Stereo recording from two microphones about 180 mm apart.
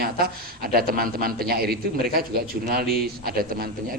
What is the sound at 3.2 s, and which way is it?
Speech, 55° right (ahead or behind).